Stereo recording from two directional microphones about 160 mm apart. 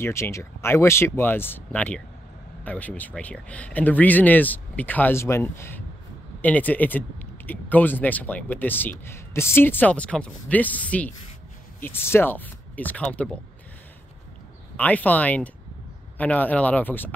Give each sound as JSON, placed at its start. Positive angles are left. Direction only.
{"t": 0.0, "sound": "speech", "side_deg": 15}
{"t": 14.8, "sound": "speech", "side_deg": 10}